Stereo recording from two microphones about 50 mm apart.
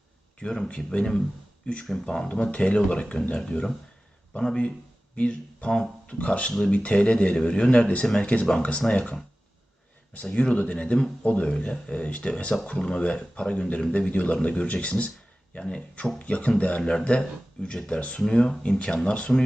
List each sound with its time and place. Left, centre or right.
0.3 s speech: centre
2.0 s speech: left
10.1 s speech: left